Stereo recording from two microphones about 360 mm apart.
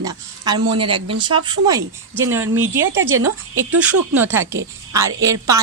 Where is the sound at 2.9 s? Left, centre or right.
Right.